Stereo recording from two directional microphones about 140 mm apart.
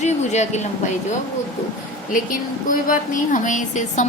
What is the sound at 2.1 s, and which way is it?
A woman's voice, 70° left (ahead or behind).